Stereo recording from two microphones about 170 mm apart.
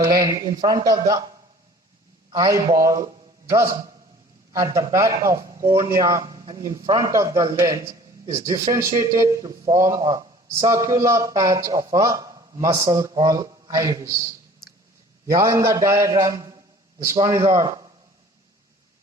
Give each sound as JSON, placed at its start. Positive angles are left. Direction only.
{"t": 0.2, "sound": "a man's voice", "side_deg": -20}
{"t": 2.3, "sound": "a man's voice", "side_deg": -20}
{"t": 15.3, "sound": "a man's voice", "side_deg": -20}